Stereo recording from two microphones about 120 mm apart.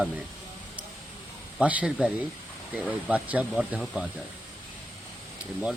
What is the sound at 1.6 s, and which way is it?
Speech, 10° right (ahead or behind).